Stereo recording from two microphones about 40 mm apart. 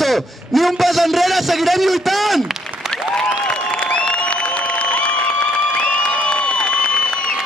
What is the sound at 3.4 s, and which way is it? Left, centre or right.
Applause, left.